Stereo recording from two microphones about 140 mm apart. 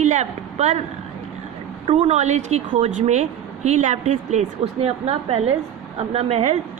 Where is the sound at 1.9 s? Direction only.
50° right (ahead or behind).